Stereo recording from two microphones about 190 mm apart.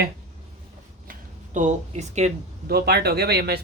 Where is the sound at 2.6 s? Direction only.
55° right (ahead or behind).